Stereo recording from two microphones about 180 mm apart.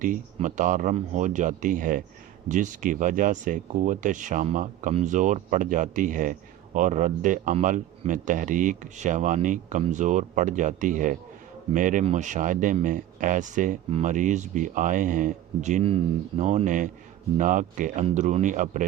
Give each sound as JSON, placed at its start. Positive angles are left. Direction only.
{"t": 0.0, "sound": "speech", "side_deg": -45}